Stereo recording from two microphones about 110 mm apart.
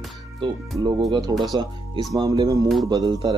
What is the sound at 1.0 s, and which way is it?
Speech, 40° right (ahead or behind).